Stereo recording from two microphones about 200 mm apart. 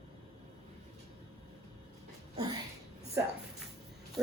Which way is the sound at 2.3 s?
20° right (ahead or behind).